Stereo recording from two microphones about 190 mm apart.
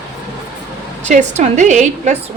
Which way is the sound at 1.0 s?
40° right (ahead or behind).